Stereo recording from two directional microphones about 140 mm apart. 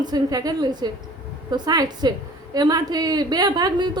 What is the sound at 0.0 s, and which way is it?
A woman's voice, 25° right (ahead or behind).